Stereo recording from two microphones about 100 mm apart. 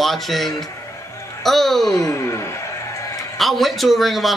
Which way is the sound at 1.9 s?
35° left (ahead or behind).